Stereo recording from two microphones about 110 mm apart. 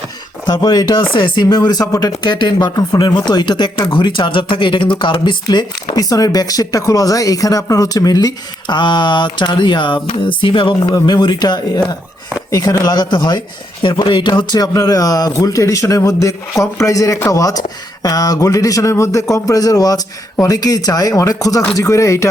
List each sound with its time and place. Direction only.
0.4 s speech: 40° left (ahead or behind); by 22.3 s 25° left (ahead or behind)